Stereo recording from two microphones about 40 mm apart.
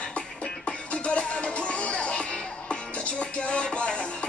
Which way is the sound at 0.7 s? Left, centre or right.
Left.